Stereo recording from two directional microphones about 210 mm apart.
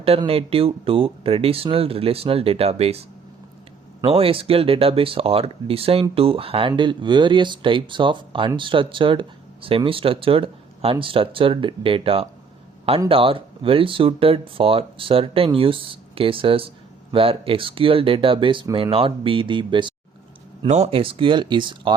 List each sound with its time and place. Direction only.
0.0 s speech: 25° right (ahead or behind)
4.0 s speech: 25° right (ahead or behind)